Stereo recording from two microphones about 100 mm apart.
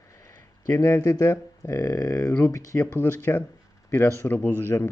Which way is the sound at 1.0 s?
35° left (ahead or behind).